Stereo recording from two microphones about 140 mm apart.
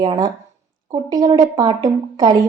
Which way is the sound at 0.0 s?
30° right (ahead or behind).